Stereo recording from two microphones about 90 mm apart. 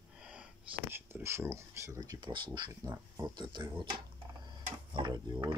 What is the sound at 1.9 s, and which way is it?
Speech, 40° right (ahead or behind).